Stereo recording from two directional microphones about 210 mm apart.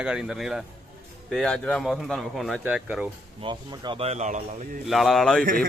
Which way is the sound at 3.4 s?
20° right (ahead or behind).